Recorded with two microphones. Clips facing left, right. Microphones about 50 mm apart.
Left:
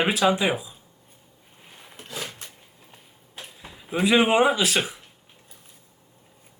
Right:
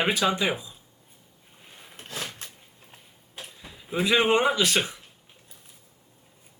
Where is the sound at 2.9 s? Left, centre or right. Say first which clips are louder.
Even; centre.